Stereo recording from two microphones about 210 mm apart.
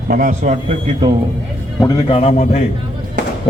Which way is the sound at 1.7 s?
20° left (ahead or behind).